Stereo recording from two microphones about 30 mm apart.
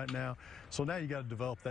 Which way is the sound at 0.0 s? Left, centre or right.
Left.